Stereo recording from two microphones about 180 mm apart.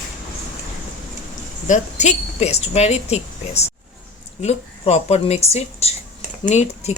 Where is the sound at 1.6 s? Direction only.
40° left (ahead or behind).